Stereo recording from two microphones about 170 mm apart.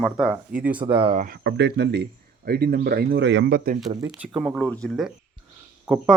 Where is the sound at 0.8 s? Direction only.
30° right (ahead or behind).